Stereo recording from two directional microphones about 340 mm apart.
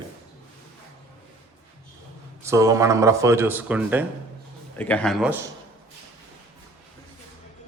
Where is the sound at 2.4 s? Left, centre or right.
Centre.